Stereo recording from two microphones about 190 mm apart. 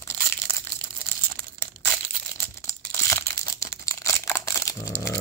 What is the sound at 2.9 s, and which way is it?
Crumpling, 10° left (ahead or behind).